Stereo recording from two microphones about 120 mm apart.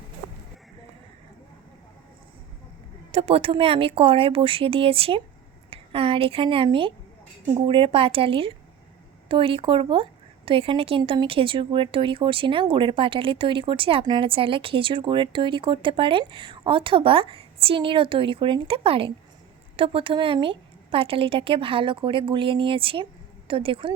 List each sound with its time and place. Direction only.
3.1 s a woman's voice: 55° right (ahead or behind)